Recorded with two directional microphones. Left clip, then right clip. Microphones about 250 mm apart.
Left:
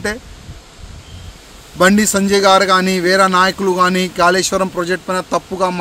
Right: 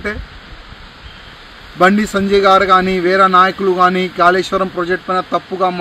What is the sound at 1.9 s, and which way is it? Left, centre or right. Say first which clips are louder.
A man's voice: even; left.